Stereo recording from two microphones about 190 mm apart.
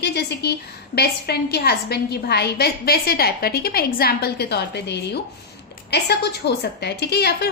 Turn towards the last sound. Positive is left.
turn(degrees=60)  # may be behind; listen again after turning